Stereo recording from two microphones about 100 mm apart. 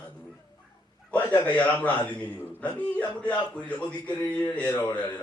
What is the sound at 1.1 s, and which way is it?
A man's voice, 15° left (ahead or behind).